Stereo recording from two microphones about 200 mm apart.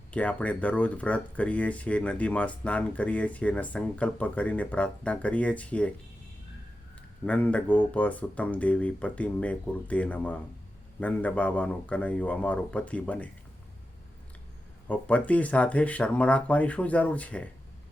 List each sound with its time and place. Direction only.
0.1 s speech: 5° left (ahead or behind)
7.3 s speech: 5° left (ahead or behind)
14.8 s speech: 5° left (ahead or behind)